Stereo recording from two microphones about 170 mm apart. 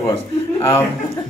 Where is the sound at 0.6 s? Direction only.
15° left (ahead or behind).